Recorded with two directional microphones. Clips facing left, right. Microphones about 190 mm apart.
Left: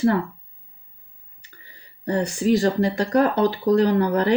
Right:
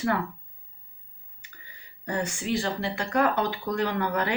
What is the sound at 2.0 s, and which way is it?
Speech, 35° left (ahead or behind).